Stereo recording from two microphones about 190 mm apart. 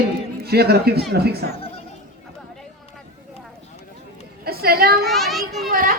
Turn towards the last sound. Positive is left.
turn(degrees=-45)  # may be behind; listen again after turning